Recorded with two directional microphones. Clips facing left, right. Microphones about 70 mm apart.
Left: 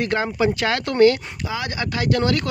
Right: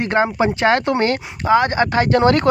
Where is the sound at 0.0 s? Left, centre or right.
Right.